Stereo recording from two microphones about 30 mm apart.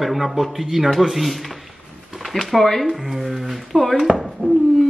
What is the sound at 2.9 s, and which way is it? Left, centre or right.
Speech, centre.